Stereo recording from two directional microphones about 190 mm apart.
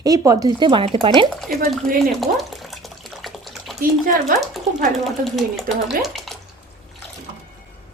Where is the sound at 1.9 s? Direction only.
Centre (ahead or behind).